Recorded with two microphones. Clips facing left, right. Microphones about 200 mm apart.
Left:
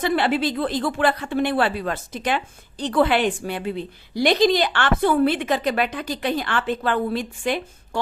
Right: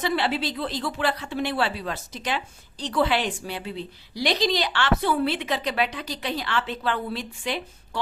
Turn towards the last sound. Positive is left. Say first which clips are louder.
# left 5 dB
turn(degrees=50)  # may be behind; listen again after turning